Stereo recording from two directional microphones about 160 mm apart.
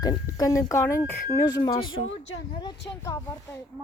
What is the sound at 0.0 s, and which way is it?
Speech, 25° left (ahead or behind).